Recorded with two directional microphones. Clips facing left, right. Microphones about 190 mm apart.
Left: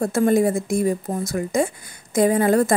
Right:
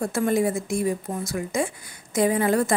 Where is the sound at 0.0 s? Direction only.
40° left (ahead or behind).